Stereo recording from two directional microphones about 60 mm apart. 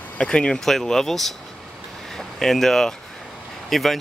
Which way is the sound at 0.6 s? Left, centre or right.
Centre.